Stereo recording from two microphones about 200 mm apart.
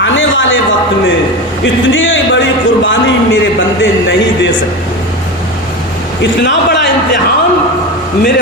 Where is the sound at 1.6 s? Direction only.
70° left (ahead or behind).